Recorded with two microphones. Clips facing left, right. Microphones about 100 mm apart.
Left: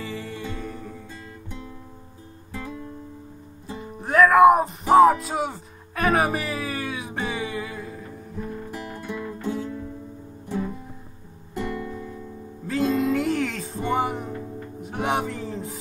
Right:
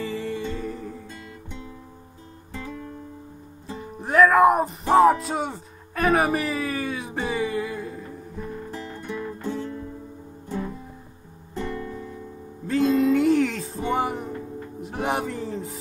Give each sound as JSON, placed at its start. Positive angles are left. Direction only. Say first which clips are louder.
{"t": 0.0, "sound": "music", "louder": "right 4 dB", "side_deg": 0}
{"t": 2.6, "sound": "music", "louder": "even", "side_deg": 20}
{"t": 4.0, "sound": "speech", "louder": "left 2 dB", "side_deg": 0}
{"t": 8.6, "sound": "music", "louder": "even", "side_deg": 15}
{"t": 11.6, "sound": "music", "louder": "left 1 dB", "side_deg": 5}